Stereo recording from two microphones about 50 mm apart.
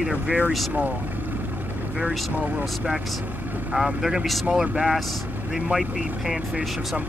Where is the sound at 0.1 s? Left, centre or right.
Right.